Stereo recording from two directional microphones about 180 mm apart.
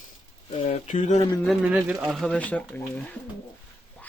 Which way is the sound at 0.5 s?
35° left (ahead or behind).